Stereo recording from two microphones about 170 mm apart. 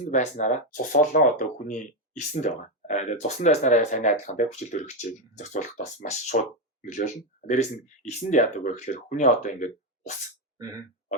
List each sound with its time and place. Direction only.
0.0 s speech: 45° left (ahead or behind)